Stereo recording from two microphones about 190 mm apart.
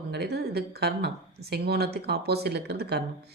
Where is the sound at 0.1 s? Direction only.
60° right (ahead or behind).